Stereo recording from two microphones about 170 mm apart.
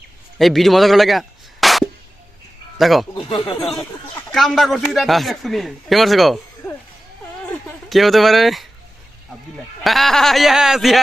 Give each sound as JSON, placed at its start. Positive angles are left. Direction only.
{"t": 0.3, "sound": "a man's voice", "side_deg": 0}
{"t": 1.6, "sound": "a sound", "side_deg": 0}
{"t": 2.7, "sound": "a man's voice", "side_deg": 0}
{"t": 3.4, "sound": "speech", "side_deg": 35}
{"t": 4.3, "sound": "a man's voice", "side_deg": 0}
{"t": 7.5, "sound": "speech", "side_deg": 0}
{"t": 9.8, "sound": "a man's voice", "side_deg": 0}